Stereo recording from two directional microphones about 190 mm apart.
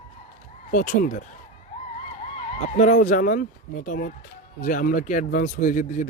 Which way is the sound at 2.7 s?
40° left (ahead or behind).